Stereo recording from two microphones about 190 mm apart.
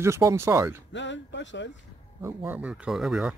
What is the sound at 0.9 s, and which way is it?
Speech, 70° left (ahead or behind).